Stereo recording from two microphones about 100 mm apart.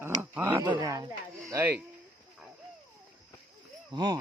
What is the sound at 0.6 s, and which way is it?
Speech, 50° right (ahead or behind).